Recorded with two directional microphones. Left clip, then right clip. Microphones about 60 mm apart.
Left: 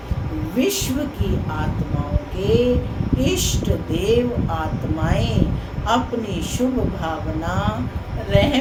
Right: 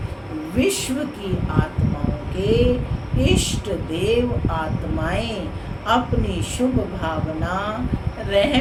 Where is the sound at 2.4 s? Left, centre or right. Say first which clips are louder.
Left 1 dB; centre.